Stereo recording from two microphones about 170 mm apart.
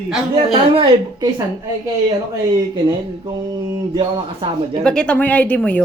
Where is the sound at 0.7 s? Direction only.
30° right (ahead or behind).